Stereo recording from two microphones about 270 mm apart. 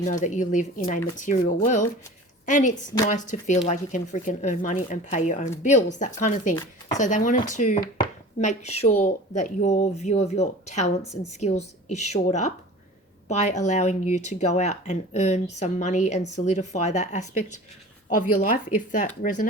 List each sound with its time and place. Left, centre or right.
0.0 s speech: left
8.0 s a sound: left
9.0 s speech: left